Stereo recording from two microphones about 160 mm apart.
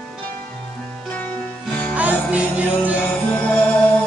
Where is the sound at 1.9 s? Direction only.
10° right (ahead or behind).